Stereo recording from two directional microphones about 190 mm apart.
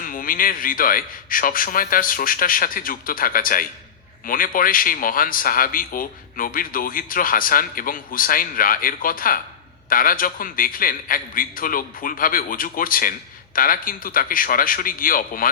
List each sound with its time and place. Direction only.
0.0 s a man's voice: 45° left (ahead or behind)